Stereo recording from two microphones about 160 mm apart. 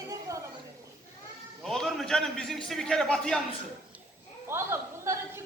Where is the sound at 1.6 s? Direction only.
Centre (ahead or behind).